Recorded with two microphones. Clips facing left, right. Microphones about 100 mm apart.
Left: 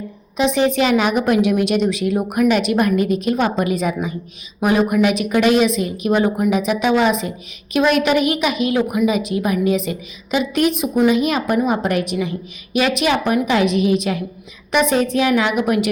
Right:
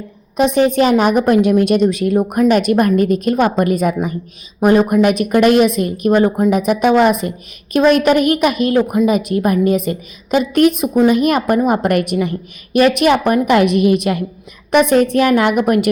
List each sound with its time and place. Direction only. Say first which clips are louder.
0.3 s a woman's voice: right 4 dB; 50° right (ahead or behind)